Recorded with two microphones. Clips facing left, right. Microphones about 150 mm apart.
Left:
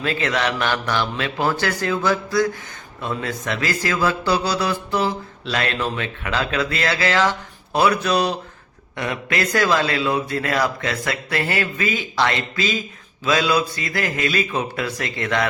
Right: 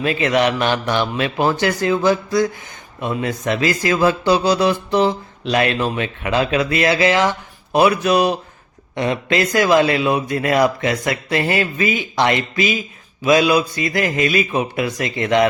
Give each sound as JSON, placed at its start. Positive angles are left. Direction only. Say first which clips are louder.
{"t": 0.0, "sound": "speech", "louder": "right 5 dB", "side_deg": -15}
{"t": 9.6, "sound": "speech", "louder": "right 5 dB", "side_deg": -15}